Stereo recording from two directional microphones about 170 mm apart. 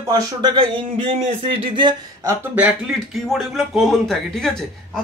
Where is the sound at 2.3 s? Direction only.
10° right (ahead or behind).